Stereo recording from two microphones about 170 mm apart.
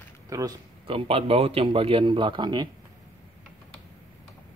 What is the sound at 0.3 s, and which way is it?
Speech, 20° right (ahead or behind).